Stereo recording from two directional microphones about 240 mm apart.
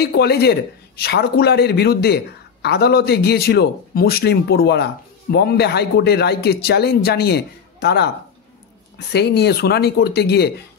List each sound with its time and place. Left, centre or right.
0.0 s a man's voice: left